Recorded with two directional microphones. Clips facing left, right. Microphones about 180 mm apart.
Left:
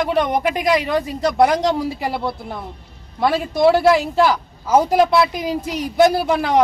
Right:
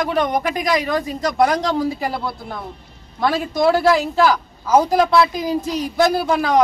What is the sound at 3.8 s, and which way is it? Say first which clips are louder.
Speech: left 1 dB; 20° left (ahead or behind).